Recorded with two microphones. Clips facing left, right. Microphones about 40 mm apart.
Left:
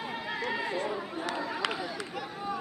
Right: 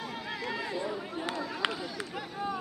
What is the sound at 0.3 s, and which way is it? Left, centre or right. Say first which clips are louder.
Chatter: left 3 dB; left.